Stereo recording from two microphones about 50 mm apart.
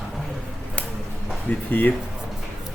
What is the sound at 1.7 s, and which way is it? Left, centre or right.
Speech, left.